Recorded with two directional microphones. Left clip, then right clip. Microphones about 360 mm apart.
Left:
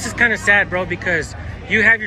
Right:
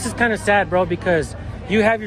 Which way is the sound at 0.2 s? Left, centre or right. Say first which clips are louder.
Left 3 dB; centre.